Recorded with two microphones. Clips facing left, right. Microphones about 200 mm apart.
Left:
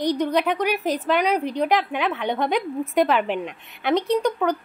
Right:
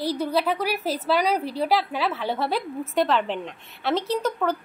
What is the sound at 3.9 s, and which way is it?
Speech, 5° right (ahead or behind).